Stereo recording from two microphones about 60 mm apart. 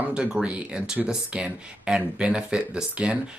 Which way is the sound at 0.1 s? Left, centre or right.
Centre.